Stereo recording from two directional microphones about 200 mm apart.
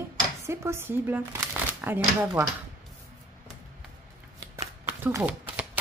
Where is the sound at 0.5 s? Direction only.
10° right (ahead or behind).